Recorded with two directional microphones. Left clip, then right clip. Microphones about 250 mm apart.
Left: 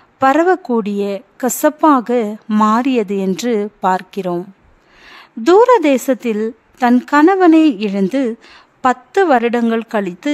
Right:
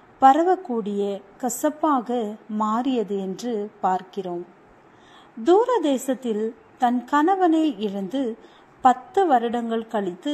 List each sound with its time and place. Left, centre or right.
0.2 s a woman's voice: left
0.8 s speech: left
1.4 s a woman's voice: left
5.4 s a woman's voice: left